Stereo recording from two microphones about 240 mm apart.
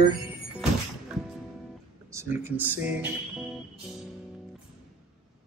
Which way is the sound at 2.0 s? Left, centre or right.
Centre.